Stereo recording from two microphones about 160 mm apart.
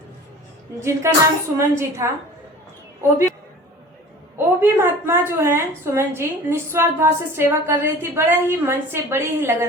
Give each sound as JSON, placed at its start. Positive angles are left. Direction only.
{"t": 0.8, "sound": "a woman's voice", "side_deg": -20}
{"t": 4.4, "sound": "a woman's voice", "side_deg": -15}